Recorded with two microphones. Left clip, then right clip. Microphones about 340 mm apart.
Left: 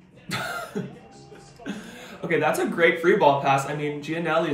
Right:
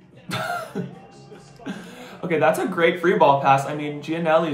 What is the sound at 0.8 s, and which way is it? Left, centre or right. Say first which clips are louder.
Speech: right 1 dB; centre.